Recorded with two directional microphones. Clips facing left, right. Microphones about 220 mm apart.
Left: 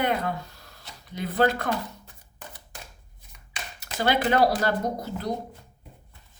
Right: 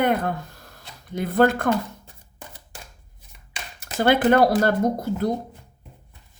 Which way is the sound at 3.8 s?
50° right (ahead or behind).